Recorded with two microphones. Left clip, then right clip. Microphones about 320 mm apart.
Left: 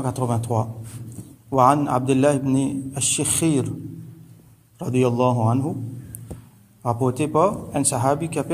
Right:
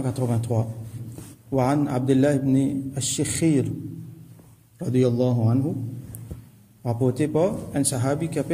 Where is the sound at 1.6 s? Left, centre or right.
Centre.